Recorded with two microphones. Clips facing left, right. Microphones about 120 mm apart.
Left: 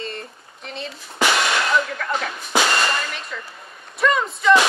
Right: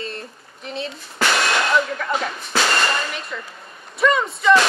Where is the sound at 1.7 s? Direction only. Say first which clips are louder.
Right 1 dB; 5° right (ahead or behind).